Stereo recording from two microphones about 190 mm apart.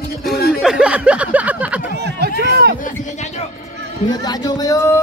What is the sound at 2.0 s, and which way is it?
Run, 60° right (ahead or behind).